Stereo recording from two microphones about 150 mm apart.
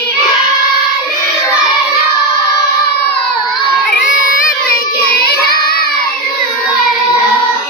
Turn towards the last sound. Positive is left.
turn(degrees=90)